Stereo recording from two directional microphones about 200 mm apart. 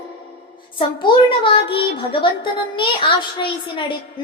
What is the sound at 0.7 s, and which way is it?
A woman's voice, 25° left (ahead or behind).